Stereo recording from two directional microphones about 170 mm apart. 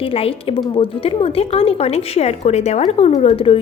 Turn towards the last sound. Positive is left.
turn(degrees=35)  # may be behind; listen again after turning